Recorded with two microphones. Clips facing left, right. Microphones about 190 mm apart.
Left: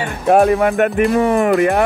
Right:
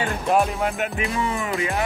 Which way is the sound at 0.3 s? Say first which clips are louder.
Left 10 dB; 60° left (ahead or behind).